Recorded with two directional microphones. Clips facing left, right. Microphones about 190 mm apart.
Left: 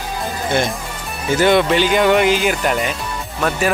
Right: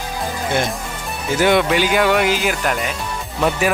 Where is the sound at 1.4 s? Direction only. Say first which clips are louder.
Left 1 dB; 10° right (ahead or behind).